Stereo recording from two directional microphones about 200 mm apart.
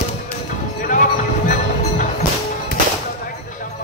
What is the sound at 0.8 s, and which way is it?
Music, 45° left (ahead or behind).